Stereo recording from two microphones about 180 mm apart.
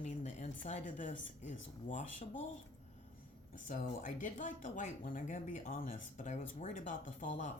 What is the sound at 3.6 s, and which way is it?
Speech, 45° left (ahead or behind).